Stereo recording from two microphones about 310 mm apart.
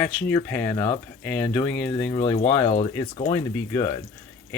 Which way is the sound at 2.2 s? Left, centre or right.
Centre.